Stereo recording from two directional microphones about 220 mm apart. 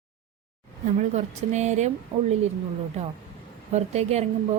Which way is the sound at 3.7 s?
30° right (ahead or behind).